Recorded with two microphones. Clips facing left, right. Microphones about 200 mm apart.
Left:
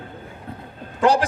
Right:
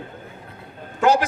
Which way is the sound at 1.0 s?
30° left (ahead or behind).